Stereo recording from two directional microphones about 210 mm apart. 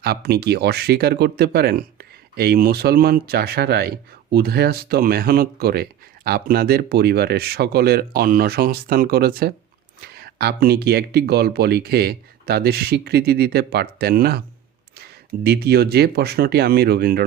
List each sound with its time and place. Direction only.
0.0 s speech: 50° right (ahead or behind)
15.4 s speech: 50° right (ahead or behind)